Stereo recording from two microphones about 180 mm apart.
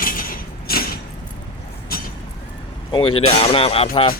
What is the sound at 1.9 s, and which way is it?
Vehicle, 55° left (ahead or behind).